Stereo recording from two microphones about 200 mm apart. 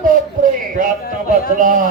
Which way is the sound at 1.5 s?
40° right (ahead or behind).